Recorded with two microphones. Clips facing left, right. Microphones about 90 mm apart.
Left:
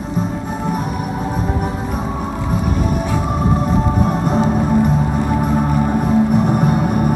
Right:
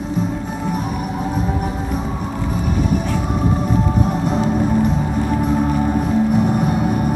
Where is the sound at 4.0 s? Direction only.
45° left (ahead or behind).